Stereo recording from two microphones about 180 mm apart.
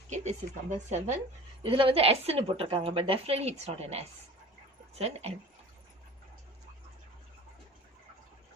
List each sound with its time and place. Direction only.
0.1 s a woman's voice: 40° right (ahead or behind)
1.6 s a woman's voice: 30° right (ahead or behind)